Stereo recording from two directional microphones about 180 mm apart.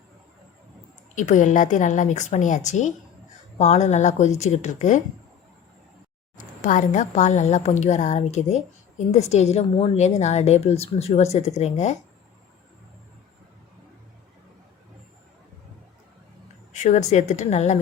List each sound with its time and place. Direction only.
1.1 s a woman's voice: 45° left (ahead or behind)
6.3 s a woman's voice: 45° left (ahead or behind)
16.7 s a woman's voice: 40° left (ahead or behind)